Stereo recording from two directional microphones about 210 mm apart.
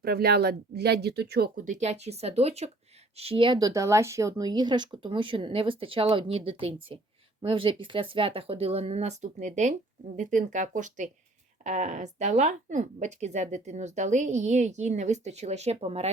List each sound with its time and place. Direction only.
0.0 s a woman's voice: 50° right (ahead or behind); by 16.1 s 30° right (ahead or behind)